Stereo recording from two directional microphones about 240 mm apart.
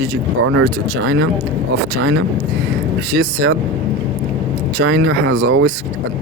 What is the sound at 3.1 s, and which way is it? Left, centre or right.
Speech, right.